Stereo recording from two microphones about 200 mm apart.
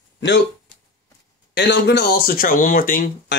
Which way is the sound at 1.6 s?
60° left (ahead or behind).